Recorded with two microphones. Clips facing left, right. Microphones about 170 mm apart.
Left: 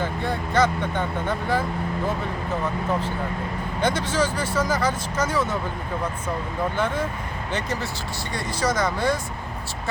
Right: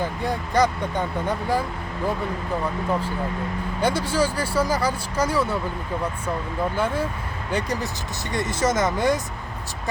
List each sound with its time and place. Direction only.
0.3 s speech: 15° right (ahead or behind)
3.8 s speech: 10° right (ahead or behind)
6.7 s speech: 10° right (ahead or behind)